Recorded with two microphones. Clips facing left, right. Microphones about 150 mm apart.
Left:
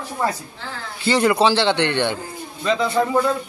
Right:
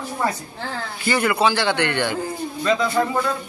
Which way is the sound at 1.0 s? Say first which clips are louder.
Left 3 dB; 25° left (ahead or behind).